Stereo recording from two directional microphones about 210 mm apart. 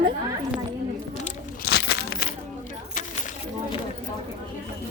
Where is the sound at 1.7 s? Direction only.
55° left (ahead or behind).